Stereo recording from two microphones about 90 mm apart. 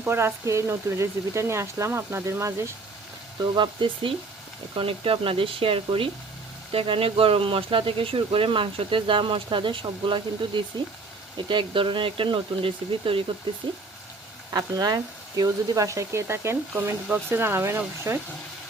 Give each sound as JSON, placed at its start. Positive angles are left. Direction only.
{"t": 0.0, "sound": "speech", "side_deg": -25}
{"t": 3.5, "sound": "speech", "side_deg": -65}
{"t": 4.7, "sound": "speech", "side_deg": -85}
{"t": 14.5, "sound": "speech", "side_deg": -45}